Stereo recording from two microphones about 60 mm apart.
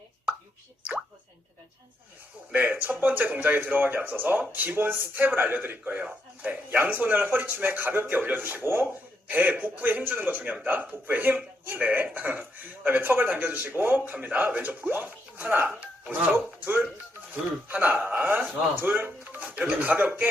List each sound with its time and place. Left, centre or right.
2.5 s a man's voice: right
4.0 s a man's voice: right
9.3 s a man's voice: right
16.3 s a man's voice: right
18.8 s a man's voice: right
19.2 s speech: right